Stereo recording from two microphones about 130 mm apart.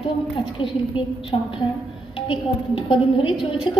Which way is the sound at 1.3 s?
45° left (ahead or behind).